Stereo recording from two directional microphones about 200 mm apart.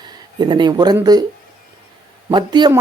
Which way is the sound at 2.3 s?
20° right (ahead or behind).